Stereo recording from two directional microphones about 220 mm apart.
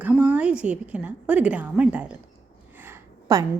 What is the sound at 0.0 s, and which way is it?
A woman's voice, 5° right (ahead or behind).